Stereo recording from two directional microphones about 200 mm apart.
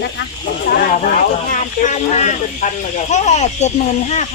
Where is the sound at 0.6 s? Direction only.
40° left (ahead or behind).